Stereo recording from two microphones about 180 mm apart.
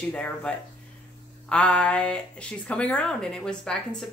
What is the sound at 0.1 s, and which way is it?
Speech, 5° left (ahead or behind).